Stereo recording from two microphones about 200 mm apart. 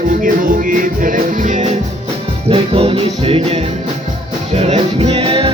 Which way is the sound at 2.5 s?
30° right (ahead or behind).